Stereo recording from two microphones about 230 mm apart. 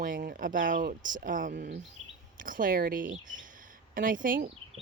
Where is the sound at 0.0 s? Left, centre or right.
Right.